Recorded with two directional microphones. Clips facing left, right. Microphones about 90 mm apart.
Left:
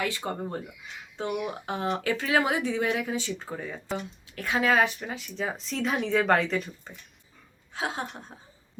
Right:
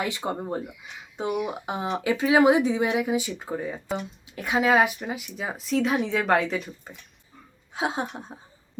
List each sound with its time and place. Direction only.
0.0 s speech: 20° right (ahead or behind)
7.7 s speech: 20° right (ahead or behind)